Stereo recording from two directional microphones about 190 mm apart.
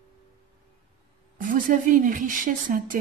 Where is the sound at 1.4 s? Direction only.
45° right (ahead or behind).